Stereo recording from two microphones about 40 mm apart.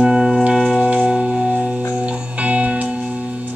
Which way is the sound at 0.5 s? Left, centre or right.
Centre.